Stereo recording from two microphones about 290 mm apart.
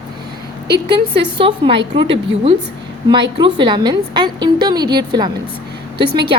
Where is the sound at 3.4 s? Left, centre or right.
Centre.